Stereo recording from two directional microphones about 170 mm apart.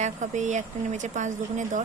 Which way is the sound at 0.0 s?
45° right (ahead or behind).